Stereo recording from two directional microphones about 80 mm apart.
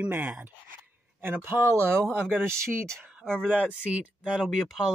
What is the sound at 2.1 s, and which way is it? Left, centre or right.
Speech, right.